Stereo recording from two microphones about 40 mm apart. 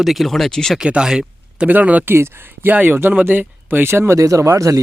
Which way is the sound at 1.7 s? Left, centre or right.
Right.